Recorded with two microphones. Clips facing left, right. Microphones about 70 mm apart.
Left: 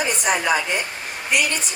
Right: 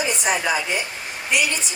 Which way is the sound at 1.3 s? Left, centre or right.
Left.